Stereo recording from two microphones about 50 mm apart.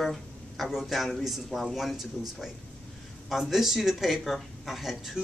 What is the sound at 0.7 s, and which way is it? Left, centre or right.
Speech, centre.